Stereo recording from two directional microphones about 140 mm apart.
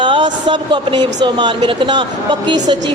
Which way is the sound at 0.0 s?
35° right (ahead or behind).